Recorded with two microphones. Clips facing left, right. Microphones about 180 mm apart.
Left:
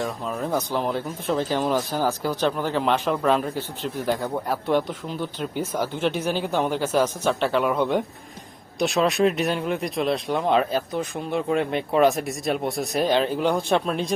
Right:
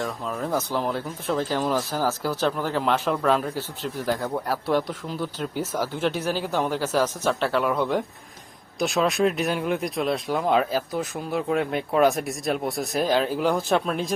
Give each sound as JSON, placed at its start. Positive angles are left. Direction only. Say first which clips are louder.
{"t": 0.0, "sound": "speech", "louder": "left 1 dB", "side_deg": 10}